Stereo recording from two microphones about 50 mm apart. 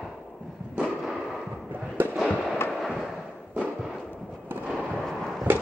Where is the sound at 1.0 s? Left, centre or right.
Centre.